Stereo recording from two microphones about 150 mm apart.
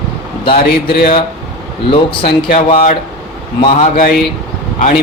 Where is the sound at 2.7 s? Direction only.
45° left (ahead or behind).